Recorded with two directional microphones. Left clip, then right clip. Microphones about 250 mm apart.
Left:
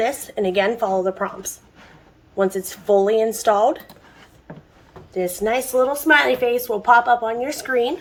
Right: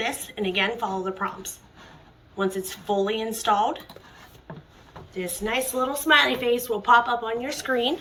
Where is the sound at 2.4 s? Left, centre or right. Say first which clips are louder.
Left 6 dB; left.